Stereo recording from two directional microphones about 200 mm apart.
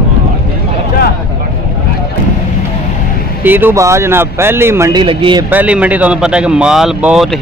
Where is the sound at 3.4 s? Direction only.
10° right (ahead or behind).